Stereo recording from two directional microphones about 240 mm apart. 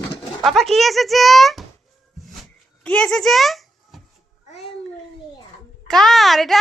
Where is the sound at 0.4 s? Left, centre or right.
Centre.